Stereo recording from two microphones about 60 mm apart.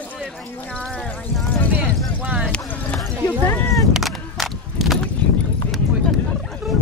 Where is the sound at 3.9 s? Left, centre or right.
Centre.